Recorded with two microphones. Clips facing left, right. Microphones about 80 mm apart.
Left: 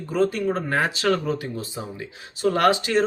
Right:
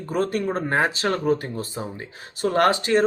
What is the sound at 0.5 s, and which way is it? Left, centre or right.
Speech, right.